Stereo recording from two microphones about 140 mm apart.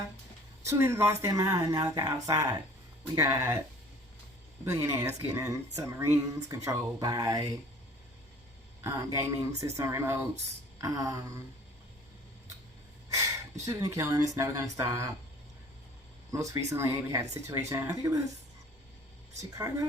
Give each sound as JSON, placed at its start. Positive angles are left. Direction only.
{"t": 0.6, "sound": "speech", "side_deg": -20}
{"t": 4.6, "sound": "speech", "side_deg": -20}
{"t": 8.8, "sound": "speech", "side_deg": -20}
{"t": 13.7, "sound": "speech", "side_deg": -25}
{"t": 16.3, "sound": "speech", "side_deg": -20}
{"t": 19.4, "sound": "speech", "side_deg": -20}